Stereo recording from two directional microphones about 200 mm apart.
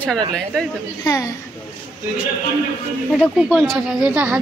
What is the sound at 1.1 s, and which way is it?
Speech, 15° left (ahead or behind).